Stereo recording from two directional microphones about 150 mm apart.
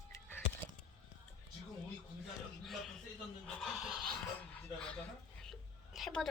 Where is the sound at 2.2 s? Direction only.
Centre (ahead or behind).